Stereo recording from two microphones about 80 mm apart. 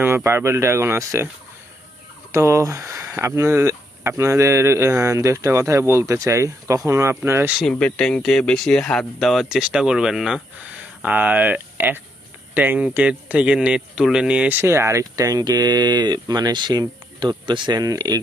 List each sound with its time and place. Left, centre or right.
0.0 s speech: right
2.3 s speech: right
7.8 s speech: centre
10.6 s speech: centre
14.6 s speech: right
15.1 s speech: right
17.7 s speech: right